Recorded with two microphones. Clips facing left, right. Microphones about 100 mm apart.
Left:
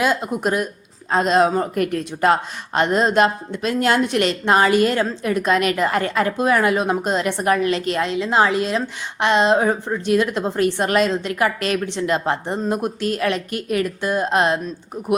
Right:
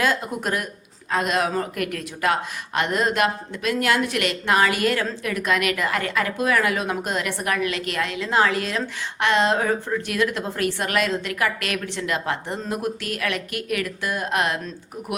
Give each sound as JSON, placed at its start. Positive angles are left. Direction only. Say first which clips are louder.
{"t": 0.0, "sound": "a woman's voice", "louder": "left 4 dB", "side_deg": 20}